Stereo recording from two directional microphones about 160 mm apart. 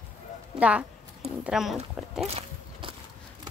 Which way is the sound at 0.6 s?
5° right (ahead or behind).